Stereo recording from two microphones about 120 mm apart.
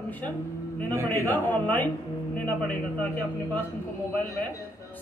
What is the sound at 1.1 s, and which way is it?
A man's voice, 15° left (ahead or behind).